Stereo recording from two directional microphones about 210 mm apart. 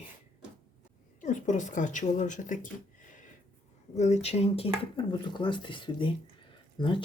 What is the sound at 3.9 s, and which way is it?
Speech, 35° left (ahead or behind).